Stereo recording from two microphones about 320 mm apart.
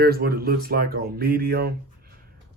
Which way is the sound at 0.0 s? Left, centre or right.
Right.